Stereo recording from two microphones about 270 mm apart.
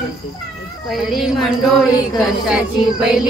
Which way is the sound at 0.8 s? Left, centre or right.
Centre.